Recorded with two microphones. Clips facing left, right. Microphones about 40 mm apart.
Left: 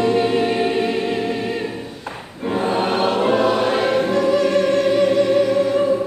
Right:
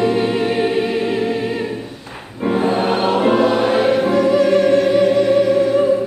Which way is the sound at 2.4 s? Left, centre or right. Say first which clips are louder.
Right 3 dB; centre.